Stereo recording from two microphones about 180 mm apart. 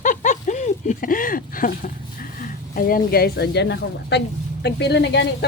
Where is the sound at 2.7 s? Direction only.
50° left (ahead or behind).